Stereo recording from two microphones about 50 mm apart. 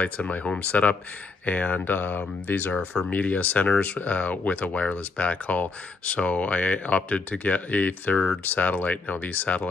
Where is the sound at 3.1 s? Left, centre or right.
Left.